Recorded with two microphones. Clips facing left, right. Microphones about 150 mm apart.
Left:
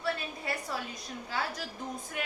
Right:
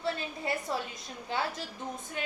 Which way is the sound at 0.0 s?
25° right (ahead or behind).